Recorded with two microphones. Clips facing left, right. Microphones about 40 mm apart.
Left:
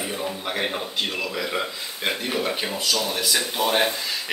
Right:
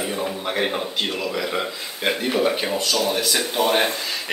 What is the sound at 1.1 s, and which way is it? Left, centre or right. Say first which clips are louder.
A man's voice: right 2 dB; centre.